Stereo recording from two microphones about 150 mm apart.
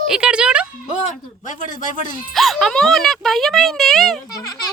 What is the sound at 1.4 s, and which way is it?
Speech, 60° left (ahead or behind).